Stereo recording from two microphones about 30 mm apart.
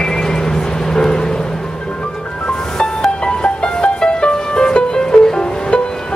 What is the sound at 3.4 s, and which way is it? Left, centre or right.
Music, left.